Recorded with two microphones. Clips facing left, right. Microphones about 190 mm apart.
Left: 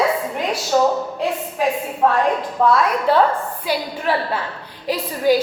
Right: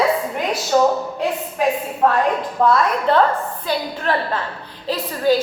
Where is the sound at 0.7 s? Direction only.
5° left (ahead or behind).